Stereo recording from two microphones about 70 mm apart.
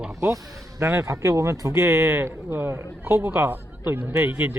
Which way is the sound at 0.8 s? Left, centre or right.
Right.